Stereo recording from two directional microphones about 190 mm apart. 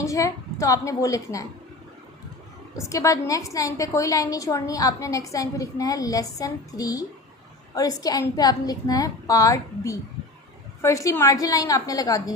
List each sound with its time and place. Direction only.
0.0 s a woman's voice: 15° left (ahead or behind)
2.7 s a woman's voice: 15° left (ahead or behind)